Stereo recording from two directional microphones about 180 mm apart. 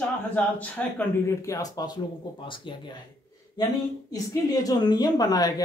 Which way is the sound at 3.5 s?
20° left (ahead or behind).